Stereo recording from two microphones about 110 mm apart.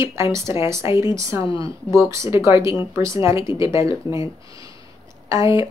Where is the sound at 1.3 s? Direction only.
50° left (ahead or behind).